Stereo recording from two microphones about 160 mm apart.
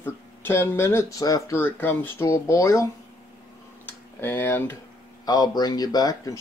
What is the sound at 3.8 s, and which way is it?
Speech, 15° left (ahead or behind).